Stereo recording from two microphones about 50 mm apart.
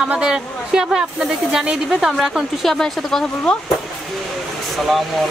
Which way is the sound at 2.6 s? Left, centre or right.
Centre.